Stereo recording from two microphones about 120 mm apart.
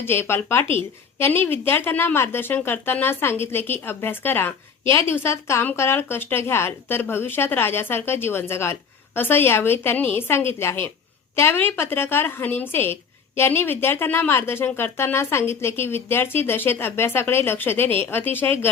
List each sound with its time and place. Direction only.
0.0 s a woman's voice: 20° left (ahead or behind)